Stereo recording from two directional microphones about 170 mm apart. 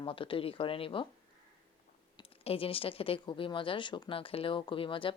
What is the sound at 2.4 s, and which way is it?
Speech, 35° left (ahead or behind).